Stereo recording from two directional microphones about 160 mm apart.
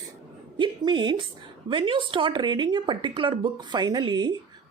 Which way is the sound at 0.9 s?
30° right (ahead or behind).